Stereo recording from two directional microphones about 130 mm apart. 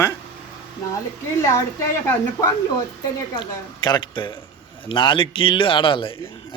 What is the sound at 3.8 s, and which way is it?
A man's voice, 35° left (ahead or behind).